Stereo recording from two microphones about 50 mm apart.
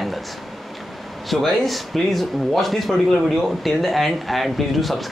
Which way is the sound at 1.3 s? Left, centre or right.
Centre.